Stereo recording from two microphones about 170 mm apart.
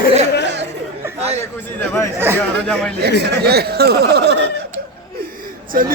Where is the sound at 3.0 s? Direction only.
75° right (ahead or behind).